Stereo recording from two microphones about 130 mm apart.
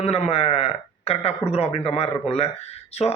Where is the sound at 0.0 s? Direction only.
55° left (ahead or behind).